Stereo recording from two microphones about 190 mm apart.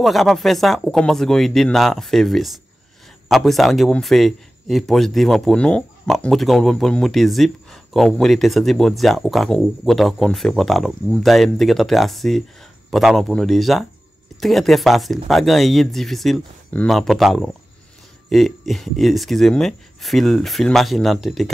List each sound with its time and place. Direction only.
0.0 s a man's voice: centre (ahead or behind)